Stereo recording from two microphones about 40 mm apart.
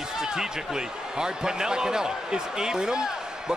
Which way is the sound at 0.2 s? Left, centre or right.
Centre.